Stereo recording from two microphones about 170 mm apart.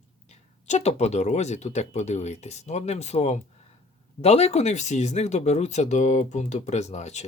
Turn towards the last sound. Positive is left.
turn(degrees=40)  # may be behind; listen again after turning